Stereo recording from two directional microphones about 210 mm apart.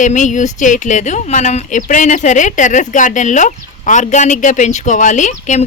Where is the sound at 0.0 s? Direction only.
35° left (ahead or behind).